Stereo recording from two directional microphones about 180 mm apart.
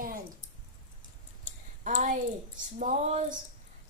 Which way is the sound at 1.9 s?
45° right (ahead or behind).